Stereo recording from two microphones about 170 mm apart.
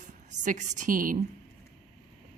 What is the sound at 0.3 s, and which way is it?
Speech, 45° right (ahead or behind).